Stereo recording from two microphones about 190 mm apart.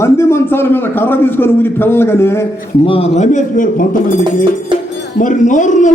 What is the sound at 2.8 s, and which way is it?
A man's voice, 30° left (ahead or behind).